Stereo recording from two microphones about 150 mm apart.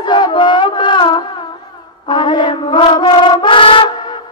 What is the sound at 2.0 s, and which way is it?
Music, 30° left (ahead or behind).